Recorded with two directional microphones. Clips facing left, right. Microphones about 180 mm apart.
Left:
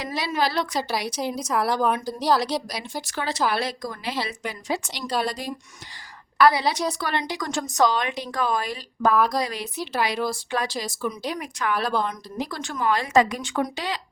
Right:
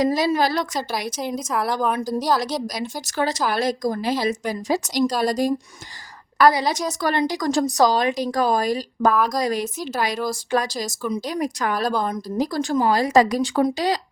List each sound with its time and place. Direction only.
0.0 s a woman's voice: 40° right (ahead or behind)
1.5 s a woman's voice: centre (ahead or behind)
2.0 s a woman's voice: 45° right (ahead or behind)